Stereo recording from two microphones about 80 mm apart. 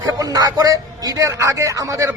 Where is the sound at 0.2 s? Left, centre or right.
Right.